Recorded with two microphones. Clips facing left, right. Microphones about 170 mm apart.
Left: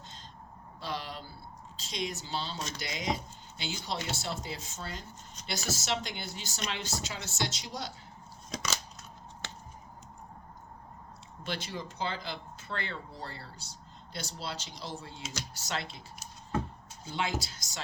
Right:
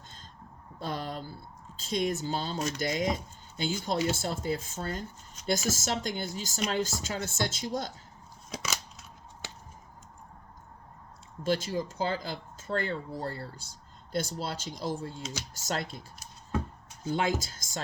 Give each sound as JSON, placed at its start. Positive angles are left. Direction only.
{"t": 0.8, "sound": "a sound", "side_deg": -50}
{"t": 1.9, "sound": "speech", "side_deg": -50}
{"t": 8.4, "sound": "scissors", "side_deg": -10}
{"t": 11.4, "sound": "speech", "side_deg": -45}
{"t": 17.1, "sound": "speech", "side_deg": -45}